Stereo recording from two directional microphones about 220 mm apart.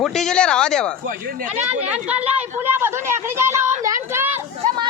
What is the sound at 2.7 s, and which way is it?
Speech, 10° right (ahead or behind).